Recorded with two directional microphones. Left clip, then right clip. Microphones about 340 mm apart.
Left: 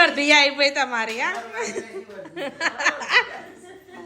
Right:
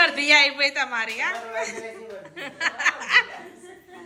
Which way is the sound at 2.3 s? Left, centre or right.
Centre.